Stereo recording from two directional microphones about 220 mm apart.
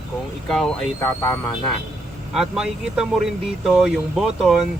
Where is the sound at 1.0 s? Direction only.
10° left (ahead or behind).